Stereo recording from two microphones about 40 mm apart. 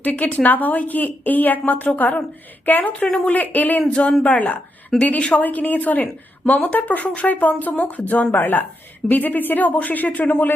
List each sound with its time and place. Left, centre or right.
0.0 s a woman's voice: left
3.8 s speech: left
4.9 s a woman's voice: left